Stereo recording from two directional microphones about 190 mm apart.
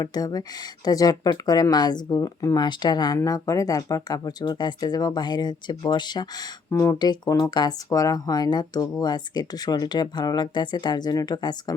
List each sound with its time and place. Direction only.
0.0 s speech: 20° left (ahead or behind)